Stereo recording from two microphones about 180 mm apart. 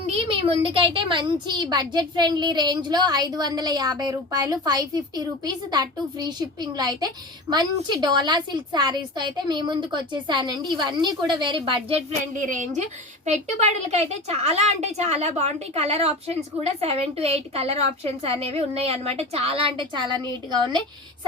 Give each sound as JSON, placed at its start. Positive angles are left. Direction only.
{"t": 0.1, "sound": "a woman's voice", "side_deg": -30}
{"t": 12.4, "sound": "a woman's voice", "side_deg": -45}